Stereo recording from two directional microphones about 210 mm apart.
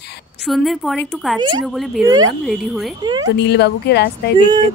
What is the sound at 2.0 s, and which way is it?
Speech, 15° right (ahead or behind).